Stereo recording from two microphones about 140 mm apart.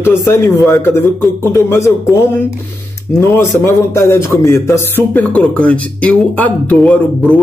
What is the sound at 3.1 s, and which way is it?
A man's voice, 20° left (ahead or behind).